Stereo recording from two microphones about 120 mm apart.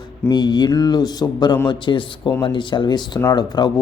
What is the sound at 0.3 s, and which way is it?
A man's voice, 35° left (ahead or behind).